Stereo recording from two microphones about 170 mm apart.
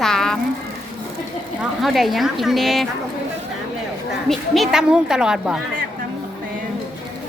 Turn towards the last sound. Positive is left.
turn(degrees=-5)  # may be behind; listen again after turning